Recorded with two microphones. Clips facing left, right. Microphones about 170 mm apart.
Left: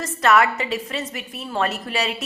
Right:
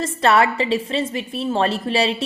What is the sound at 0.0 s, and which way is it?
A woman's voice, 30° right (ahead or behind).